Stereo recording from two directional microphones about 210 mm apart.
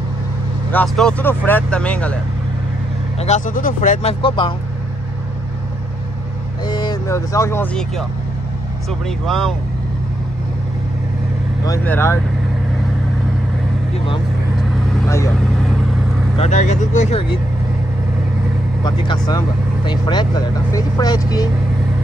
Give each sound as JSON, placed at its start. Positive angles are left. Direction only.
{"t": 0.7, "sound": "speech", "side_deg": 5}
{"t": 3.2, "sound": "speech", "side_deg": 35}
{"t": 6.6, "sound": "speech", "side_deg": 20}
{"t": 9.2, "sound": "speech", "side_deg": 0}
{"t": 11.6, "sound": "speech", "side_deg": 10}
{"t": 15.0, "sound": "speech", "side_deg": 15}
{"t": 16.3, "sound": "speech", "side_deg": 35}
{"t": 18.9, "sound": "speech", "side_deg": 20}